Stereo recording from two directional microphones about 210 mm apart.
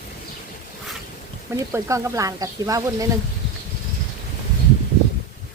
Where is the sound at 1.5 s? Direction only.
10° right (ahead or behind).